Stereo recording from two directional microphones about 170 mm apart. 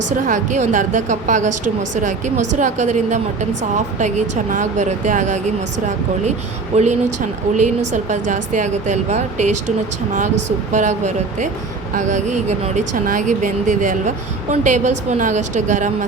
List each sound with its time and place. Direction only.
0.3 s speech: 45° right (ahead or behind)
6.7 s speech: 45° right (ahead or behind)